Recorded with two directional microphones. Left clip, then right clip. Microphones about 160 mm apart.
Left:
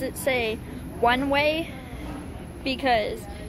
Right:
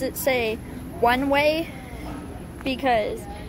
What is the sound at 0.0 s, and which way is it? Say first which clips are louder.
A woman's voice: right 2 dB; 15° right (ahead or behind).